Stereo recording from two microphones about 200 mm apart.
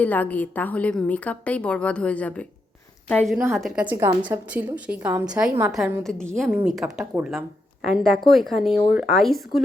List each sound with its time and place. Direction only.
0.0 s a woman's voice: 10° left (ahead or behind)
3.9 s a woman's voice: 20° right (ahead or behind)
4.3 s a woman's voice: 10° right (ahead or behind)
5.7 s a woman's voice: centre (ahead or behind)